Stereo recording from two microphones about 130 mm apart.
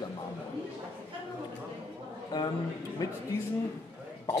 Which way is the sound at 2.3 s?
30° left (ahead or behind).